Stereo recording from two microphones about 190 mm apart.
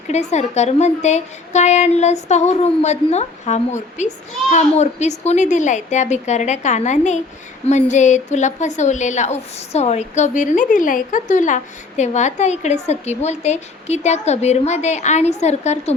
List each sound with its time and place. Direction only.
0.1 s a woman's voice: 35° left (ahead or behind)